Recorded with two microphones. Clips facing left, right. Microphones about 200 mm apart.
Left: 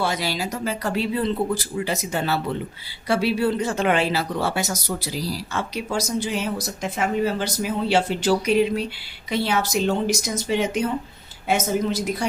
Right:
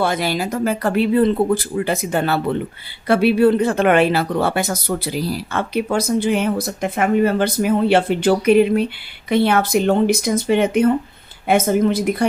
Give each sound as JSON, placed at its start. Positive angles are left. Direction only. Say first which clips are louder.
{"t": 0.0, "sound": "speech", "louder": "right 5 dB", "side_deg": -55}